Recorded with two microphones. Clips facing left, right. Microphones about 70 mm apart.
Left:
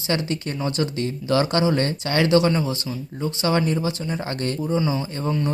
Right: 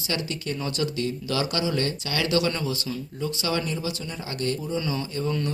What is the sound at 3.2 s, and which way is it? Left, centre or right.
Speech, left.